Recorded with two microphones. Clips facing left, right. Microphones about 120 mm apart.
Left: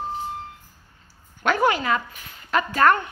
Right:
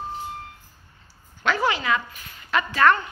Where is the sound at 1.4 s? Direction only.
50° left (ahead or behind).